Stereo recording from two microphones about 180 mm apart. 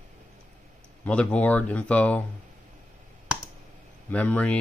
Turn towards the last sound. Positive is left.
turn(degrees=10)  # may be behind; listen again after turning